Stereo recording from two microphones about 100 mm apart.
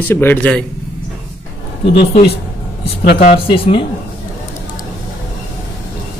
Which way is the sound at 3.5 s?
60° left (ahead or behind).